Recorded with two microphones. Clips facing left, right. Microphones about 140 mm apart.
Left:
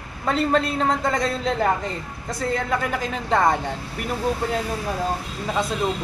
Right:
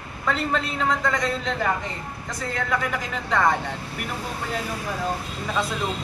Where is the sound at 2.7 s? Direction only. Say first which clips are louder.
Left 2 dB; 30° left (ahead or behind).